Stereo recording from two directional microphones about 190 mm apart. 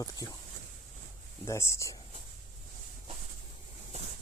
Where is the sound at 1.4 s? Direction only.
15° left (ahead or behind).